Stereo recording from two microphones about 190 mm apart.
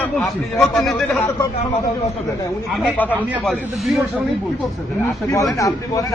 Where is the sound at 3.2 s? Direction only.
10° right (ahead or behind).